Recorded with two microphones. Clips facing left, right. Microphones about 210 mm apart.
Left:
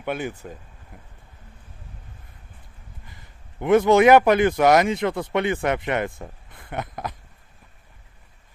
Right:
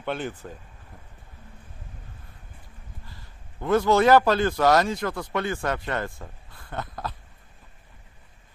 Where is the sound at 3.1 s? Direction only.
20° left (ahead or behind).